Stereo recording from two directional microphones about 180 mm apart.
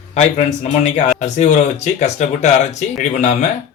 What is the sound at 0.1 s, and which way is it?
A man's voice, 40° left (ahead or behind).